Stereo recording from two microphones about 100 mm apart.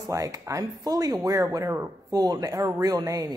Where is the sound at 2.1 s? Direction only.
40° right (ahead or behind).